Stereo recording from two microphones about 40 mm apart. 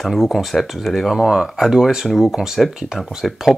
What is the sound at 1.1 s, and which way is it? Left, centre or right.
Speech, centre.